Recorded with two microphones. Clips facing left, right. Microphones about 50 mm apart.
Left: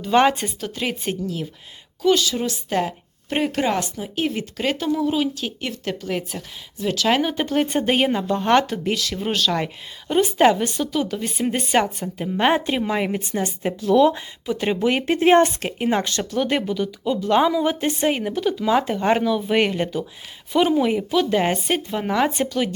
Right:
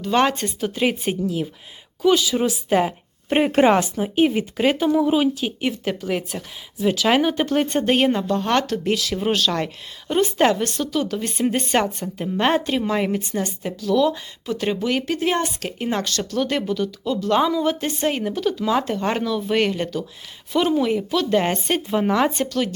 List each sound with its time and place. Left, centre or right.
0.0 s speech: centre
0.6 s a woman's voice: centre
8.3 s speech: centre
13.1 s speech: left
14.4 s speech: centre; by 15.5 s left
15.6 s a woman's voice: centre
22.4 s speech: centre